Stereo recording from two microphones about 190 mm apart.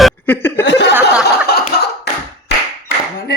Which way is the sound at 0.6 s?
70° left (ahead or behind).